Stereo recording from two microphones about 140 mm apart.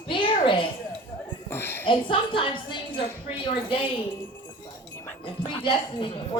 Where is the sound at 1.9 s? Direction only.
35° left (ahead or behind).